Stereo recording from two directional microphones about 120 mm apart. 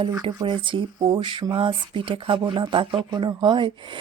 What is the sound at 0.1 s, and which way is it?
Speech, 35° right (ahead or behind).